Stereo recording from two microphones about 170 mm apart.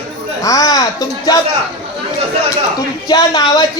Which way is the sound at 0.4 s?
20° left (ahead or behind).